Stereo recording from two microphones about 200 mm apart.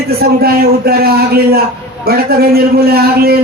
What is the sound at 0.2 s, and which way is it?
A man's voice, 50° right (ahead or behind).